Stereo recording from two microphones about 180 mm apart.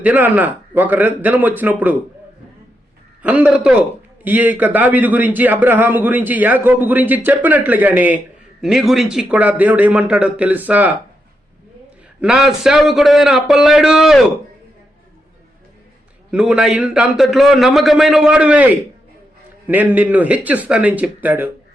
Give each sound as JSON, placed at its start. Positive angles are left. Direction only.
{"t": 0.0, "sound": "a man's voice", "side_deg": -10}
{"t": 3.2, "sound": "a man's voice", "side_deg": -5}
{"t": 12.2, "sound": "a man's voice", "side_deg": -5}
{"t": 16.3, "sound": "a man's voice", "side_deg": -5}